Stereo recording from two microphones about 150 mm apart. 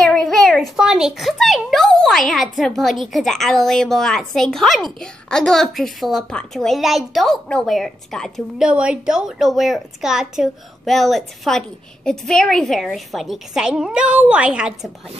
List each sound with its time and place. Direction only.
0.0 s a child's voice: 5° left (ahead or behind)